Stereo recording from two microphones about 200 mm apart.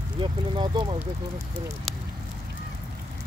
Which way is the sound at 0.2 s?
25° right (ahead or behind).